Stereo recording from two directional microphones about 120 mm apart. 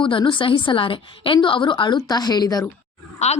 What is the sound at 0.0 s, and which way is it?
A woman's voice, 45° left (ahead or behind).